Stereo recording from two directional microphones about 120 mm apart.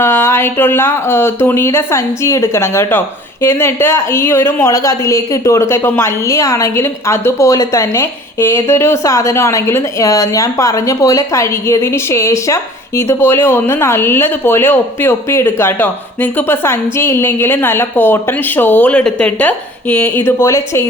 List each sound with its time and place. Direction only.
0.0 s speech: 20° left (ahead or behind)